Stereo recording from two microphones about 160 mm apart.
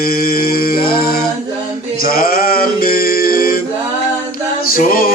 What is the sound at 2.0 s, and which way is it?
Male singing, 65° left (ahead or behind).